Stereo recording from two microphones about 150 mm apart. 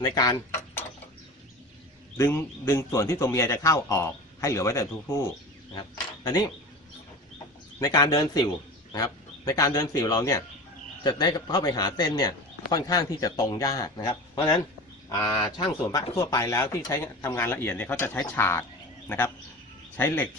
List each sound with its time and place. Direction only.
0.0 s a man's voice: 25° left (ahead or behind)
2.1 s a man's voice: 20° left (ahead or behind)
7.8 s a man's voice: 25° left (ahead or behind)